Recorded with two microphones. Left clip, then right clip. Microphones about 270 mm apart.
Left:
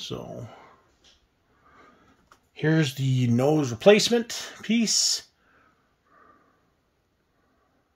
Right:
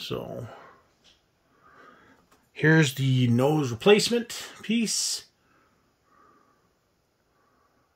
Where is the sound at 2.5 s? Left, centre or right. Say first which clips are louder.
Right 3 dB; centre.